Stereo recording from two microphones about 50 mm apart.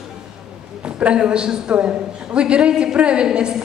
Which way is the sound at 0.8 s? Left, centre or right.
Right.